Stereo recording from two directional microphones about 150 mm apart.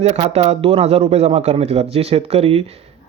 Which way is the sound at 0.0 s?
45° right (ahead or behind).